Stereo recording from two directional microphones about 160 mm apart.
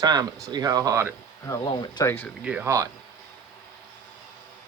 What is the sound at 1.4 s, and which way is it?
Speech, 30° left (ahead or behind).